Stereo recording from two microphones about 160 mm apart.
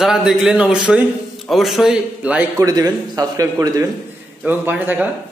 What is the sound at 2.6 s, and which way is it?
A man's voice, 25° right (ahead or behind).